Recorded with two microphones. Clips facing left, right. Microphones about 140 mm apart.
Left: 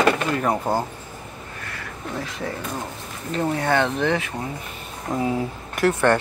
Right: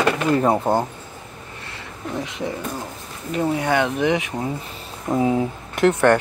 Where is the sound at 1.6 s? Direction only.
20° right (ahead or behind).